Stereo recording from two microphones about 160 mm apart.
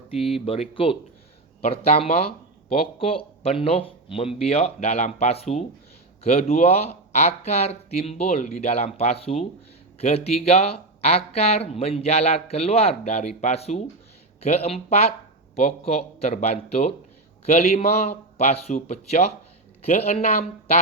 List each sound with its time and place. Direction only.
0.2 s speech: centre (ahead or behind)
0.4 s speech: 40° left (ahead or behind)